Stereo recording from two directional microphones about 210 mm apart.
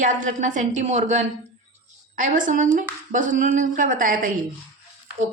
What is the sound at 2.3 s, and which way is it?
Speech, 40° right (ahead or behind).